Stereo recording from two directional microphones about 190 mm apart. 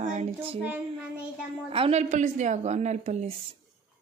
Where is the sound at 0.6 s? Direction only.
5° right (ahead or behind).